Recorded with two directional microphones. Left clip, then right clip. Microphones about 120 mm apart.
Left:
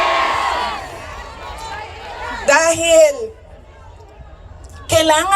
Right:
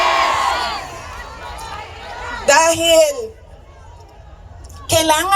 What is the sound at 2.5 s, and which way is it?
Speech, 50° left (ahead or behind).